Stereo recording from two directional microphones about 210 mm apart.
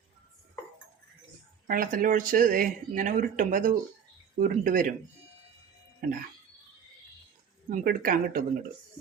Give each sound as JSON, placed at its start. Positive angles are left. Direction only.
{"t": 1.6, "sound": "speech", "side_deg": -40}
{"t": 7.7, "sound": "speech", "side_deg": -45}